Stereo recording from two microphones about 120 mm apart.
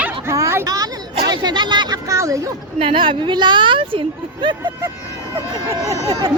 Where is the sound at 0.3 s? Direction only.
25° right (ahead or behind).